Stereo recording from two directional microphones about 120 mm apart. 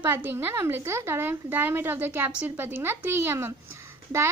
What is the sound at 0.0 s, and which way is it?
A woman's voice, 20° right (ahead or behind).